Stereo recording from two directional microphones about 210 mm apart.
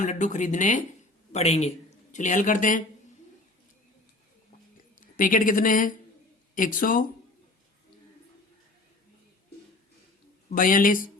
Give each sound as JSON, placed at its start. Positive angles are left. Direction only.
{"t": 0.0, "sound": "speech", "side_deg": 35}
{"t": 4.9, "sound": "a woman's voice", "side_deg": 40}
{"t": 10.5, "sound": "speech", "side_deg": 40}